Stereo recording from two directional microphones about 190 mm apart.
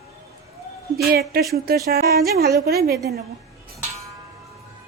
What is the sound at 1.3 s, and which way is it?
A woman's voice, 55° right (ahead or behind).